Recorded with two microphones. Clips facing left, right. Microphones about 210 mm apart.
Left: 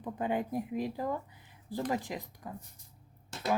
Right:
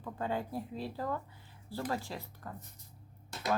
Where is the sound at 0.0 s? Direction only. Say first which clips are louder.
Left 3 dB; 20° left (ahead or behind).